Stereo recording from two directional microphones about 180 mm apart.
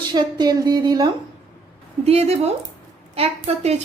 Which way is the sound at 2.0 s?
35° right (ahead or behind).